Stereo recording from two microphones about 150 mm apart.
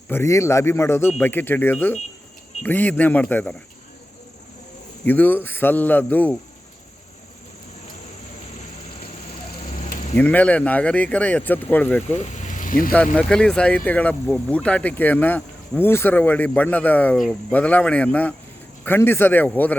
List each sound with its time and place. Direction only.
0.1 s speech: 20° left (ahead or behind)
5.0 s speech: 10° left (ahead or behind)
10.2 s speech: 10° left (ahead or behind)
12.1 s vehicle: 50° left (ahead or behind)
13.1 s speech: 5° left (ahead or behind)